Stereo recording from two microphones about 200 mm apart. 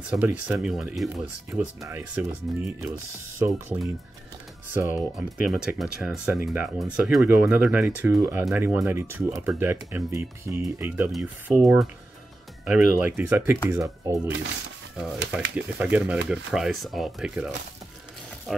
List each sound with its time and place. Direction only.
0.1 s speech: 5° right (ahead or behind)
11.1 s speech: centre (ahead or behind)
12.6 s speech: 10° right (ahead or behind)
15.5 s speech: 5° right (ahead or behind)
18.5 s speech: centre (ahead or behind)